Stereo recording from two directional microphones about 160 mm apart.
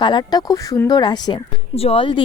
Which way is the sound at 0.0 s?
25° left (ahead or behind).